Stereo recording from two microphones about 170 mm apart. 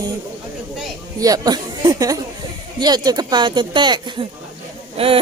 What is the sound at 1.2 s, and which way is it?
A woman's voice, 20° right (ahead or behind).